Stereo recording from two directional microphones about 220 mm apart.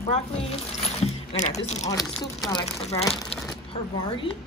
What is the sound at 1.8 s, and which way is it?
Speech, 15° left (ahead or behind).